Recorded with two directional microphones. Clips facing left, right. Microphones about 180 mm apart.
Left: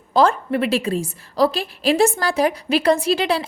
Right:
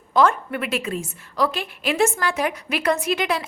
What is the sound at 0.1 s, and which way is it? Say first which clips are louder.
A woman's voice: left 2 dB; 30° left (ahead or behind).